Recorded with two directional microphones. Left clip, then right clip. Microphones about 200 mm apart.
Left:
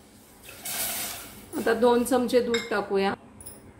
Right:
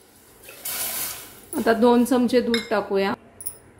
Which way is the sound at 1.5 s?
20° right (ahead or behind).